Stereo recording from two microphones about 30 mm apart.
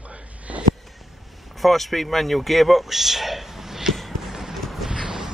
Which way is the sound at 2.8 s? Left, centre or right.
Centre.